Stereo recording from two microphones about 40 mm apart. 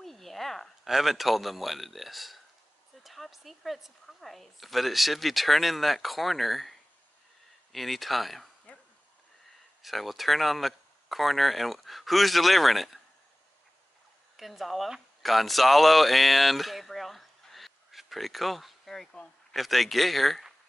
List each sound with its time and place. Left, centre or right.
0.0 s a sound: centre
0.8 s a woman's voice: centre
8.7 s dog: left
9.8 s a woman's voice: centre
14.3 s speech: centre
19.2 s a man's voice: left
19.5 s a woman's voice: centre